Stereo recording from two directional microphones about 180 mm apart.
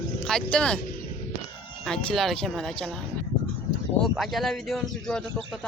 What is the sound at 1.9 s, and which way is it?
Speech, 5° left (ahead or behind).